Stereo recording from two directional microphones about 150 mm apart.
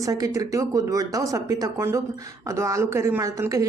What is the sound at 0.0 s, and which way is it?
A woman's voice, 20° right (ahead or behind).